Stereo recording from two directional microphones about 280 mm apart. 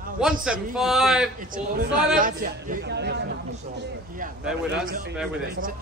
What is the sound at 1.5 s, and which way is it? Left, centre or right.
A man's voice, right.